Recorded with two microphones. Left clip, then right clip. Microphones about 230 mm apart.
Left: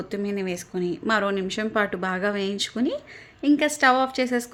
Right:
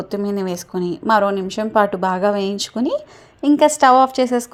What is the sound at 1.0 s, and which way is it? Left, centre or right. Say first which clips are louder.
Speech: right 8 dB; centre.